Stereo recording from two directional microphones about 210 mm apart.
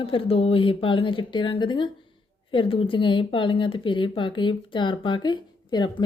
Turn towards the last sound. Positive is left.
turn(degrees=20)  # may be behind; listen again after turning